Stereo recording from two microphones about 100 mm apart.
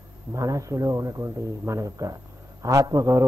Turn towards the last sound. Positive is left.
turn(degrees=-35)  # may be behind; listen again after turning